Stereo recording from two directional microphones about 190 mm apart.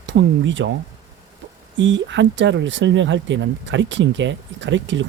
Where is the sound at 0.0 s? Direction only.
75° right (ahead or behind).